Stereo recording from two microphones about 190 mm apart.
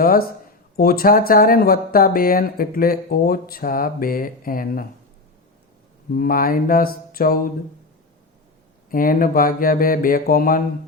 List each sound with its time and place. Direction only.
0.0 s speech: 50° left (ahead or behind)
6.1 s speech: 50° left (ahead or behind)
8.9 s speech: 50° left (ahead or behind)